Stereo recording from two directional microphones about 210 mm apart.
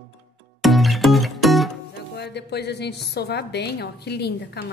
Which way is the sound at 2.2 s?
50° left (ahead or behind).